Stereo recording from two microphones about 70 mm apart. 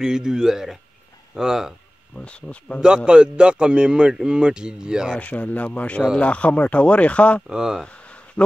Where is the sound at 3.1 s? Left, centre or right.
Centre.